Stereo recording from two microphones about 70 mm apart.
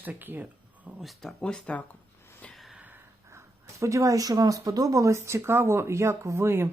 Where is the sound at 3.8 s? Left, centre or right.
Right.